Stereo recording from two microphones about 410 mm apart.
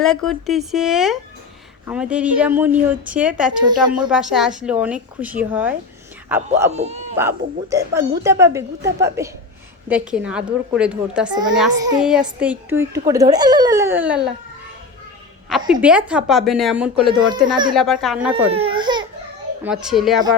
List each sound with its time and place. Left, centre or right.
0.0 s a child's voice: centre
6.5 s a child's voice: centre
15.4 s a child's voice: centre
17.7 s a child's voice: centre
18.3 s a child's voice: centre